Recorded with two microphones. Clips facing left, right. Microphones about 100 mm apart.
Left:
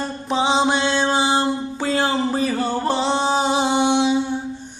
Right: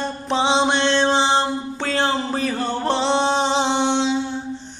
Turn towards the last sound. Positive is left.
turn(degrees=15)  # may be behind; listen again after turning